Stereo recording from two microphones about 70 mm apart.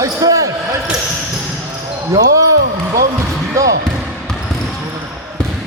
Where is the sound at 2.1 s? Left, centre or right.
Right.